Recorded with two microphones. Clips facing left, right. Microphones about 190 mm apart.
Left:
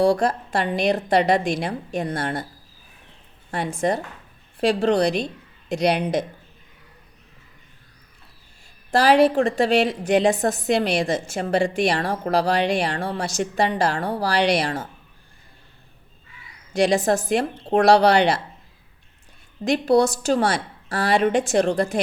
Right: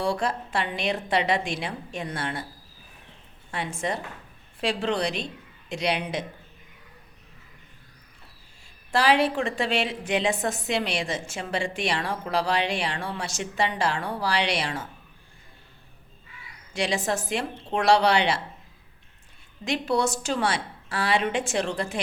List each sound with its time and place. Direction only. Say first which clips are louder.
0.0 s a woman's voice: left 8 dB; 40° left (ahead or behind)
3.5 s a woman's voice: left 7 dB; 40° left (ahead or behind)
8.9 s a woman's voice: left 6 dB; 40° left (ahead or behind)
16.7 s a woman's voice: left 8 dB; 40° left (ahead or behind)
19.6 s a woman's voice: left 7 dB; 40° left (ahead or behind)